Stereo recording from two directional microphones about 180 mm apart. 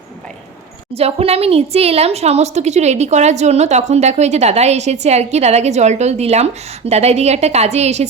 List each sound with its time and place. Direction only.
0.9 s a woman's voice: 35° right (ahead or behind)